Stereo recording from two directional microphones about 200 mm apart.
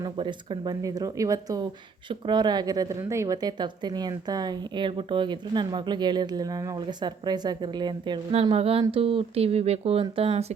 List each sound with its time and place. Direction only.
0.0 s a woman's voice: 25° right (ahead or behind)